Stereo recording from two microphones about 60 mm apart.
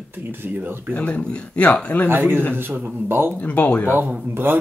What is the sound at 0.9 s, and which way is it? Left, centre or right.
Speech, left.